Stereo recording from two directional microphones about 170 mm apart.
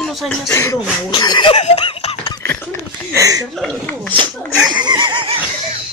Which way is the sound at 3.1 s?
20° right (ahead or behind).